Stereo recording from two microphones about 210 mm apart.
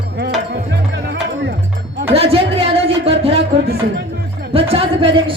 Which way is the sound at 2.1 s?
25° right (ahead or behind).